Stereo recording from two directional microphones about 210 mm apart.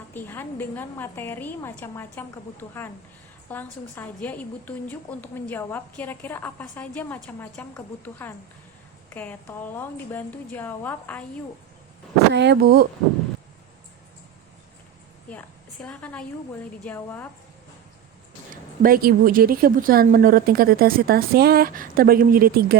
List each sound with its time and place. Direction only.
0.1 s a woman's voice: 10° left (ahead or behind)
12.3 s a woman's voice: 55° right (ahead or behind)
15.3 s a woman's voice: 5° left (ahead or behind)
18.5 s a woman's voice: 40° right (ahead or behind)